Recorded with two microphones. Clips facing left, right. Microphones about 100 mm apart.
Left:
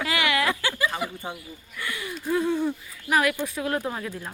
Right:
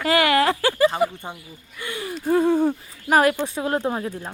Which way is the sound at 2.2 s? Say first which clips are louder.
Right 6 dB; 45° right (ahead or behind).